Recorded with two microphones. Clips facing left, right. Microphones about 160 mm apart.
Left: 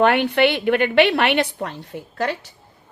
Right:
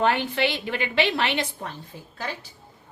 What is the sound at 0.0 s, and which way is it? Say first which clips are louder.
A woman's voice: left 7 dB; 65° left (ahead or behind).